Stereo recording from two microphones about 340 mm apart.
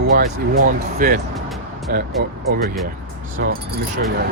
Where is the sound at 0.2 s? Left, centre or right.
Right.